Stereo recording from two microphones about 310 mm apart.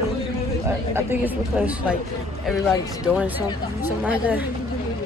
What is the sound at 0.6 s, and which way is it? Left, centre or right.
Speech, centre.